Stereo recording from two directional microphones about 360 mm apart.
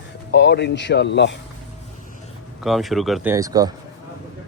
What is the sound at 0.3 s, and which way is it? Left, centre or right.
Speech, left.